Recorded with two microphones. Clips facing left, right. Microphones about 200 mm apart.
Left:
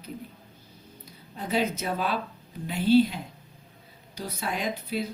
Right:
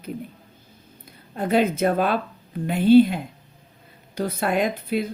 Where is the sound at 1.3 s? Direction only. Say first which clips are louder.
Right 7 dB; 55° right (ahead or behind).